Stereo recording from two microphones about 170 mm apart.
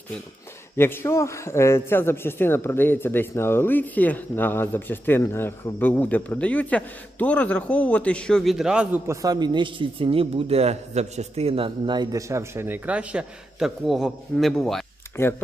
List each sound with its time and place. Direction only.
0.8 s a man's voice: 15° left (ahead or behind); by 9.1 s 10° right (ahead or behind)
9.2 s speech: 25° right (ahead or behind); by 14.8 s 5° left (ahead or behind)
15.1 s speech: 15° left (ahead or behind)